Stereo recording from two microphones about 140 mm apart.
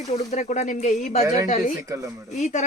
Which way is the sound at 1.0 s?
50° left (ahead or behind).